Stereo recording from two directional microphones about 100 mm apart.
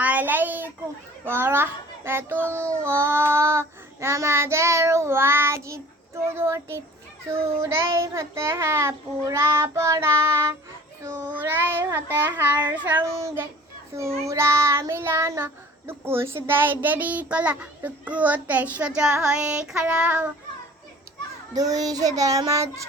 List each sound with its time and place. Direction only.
0.0 s a sound: 15° right (ahead or behind)
1.2 s child singing: 25° right (ahead or behind)
11.3 s child singing: 20° right (ahead or behind)
13.1 s child singing: 30° right (ahead or behind)
15.9 s a child's voice: 25° right (ahead or behind)
21.5 s child singing: 40° right (ahead or behind)